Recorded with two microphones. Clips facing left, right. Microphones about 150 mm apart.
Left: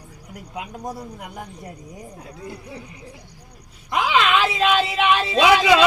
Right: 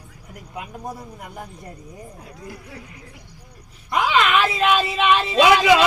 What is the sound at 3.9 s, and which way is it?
Speech, 15° left (ahead or behind).